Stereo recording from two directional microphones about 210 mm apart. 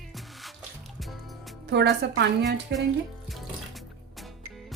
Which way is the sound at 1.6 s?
55° right (ahead or behind).